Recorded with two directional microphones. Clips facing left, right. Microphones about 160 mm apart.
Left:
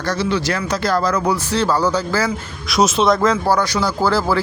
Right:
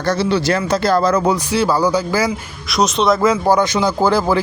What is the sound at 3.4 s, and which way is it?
Speech, 20° right (ahead or behind).